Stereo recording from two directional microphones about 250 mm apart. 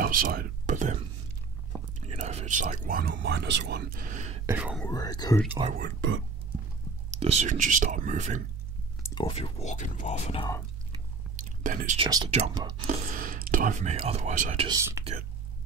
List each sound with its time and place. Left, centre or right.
0.0 s whispering: right
2.0 s speech: right
4.5 s speech: centre
4.8 s speech: centre
5.8 s speech: right
7.1 s speech: right
9.0 s speech: centre
11.3 s whispering: right
12.3 s speech: right
12.8 s speech: right
14.7 s speech: centre